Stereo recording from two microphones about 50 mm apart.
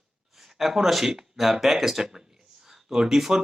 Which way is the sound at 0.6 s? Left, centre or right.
Centre.